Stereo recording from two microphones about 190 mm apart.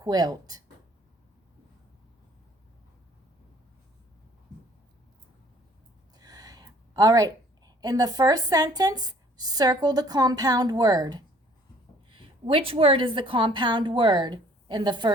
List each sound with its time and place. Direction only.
0.0 s speech: 20° right (ahead or behind)
6.1 s a woman's voice: 20° right (ahead or behind)